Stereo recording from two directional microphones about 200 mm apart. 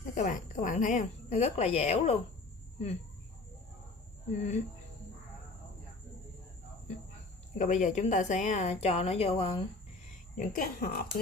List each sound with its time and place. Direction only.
0.0 s a woman's voice: 40° left (ahead or behind)
4.3 s a woman's voice: 35° left (ahead or behind)
7.6 s a woman's voice: 35° left (ahead or behind)
10.3 s a woman's voice: 45° left (ahead or behind)